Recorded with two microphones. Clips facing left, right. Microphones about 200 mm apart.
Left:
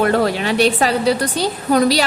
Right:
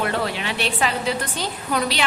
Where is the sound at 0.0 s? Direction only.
45° left (ahead or behind).